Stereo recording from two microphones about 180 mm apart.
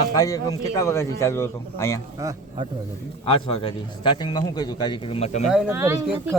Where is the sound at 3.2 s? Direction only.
30° left (ahead or behind).